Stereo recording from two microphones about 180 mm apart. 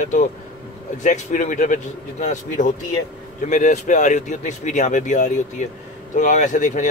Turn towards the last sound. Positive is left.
turn(degrees=45)  # may be behind; listen again after turning